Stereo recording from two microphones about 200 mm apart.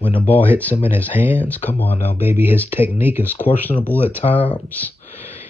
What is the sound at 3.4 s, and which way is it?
Speech, 25° left (ahead or behind).